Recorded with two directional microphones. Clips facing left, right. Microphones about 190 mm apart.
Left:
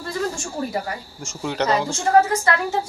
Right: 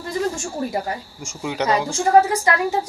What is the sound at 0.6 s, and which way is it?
Speech, 20° right (ahead or behind).